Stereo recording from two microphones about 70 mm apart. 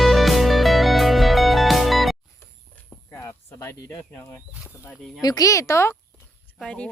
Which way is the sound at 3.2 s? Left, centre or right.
Left.